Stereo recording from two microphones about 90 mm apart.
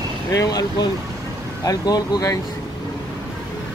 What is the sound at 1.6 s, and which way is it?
Speech, 40° left (ahead or behind).